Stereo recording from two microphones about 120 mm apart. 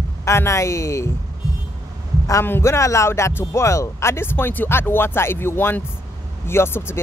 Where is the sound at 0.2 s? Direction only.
25° left (ahead or behind).